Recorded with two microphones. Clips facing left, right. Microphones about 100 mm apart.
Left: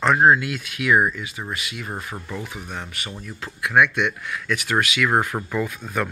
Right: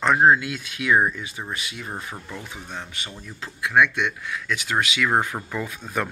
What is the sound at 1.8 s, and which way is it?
Speech, 5° left (ahead or behind).